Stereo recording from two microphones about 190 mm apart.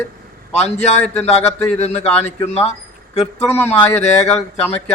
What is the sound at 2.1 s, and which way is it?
Speech, 10° left (ahead or behind).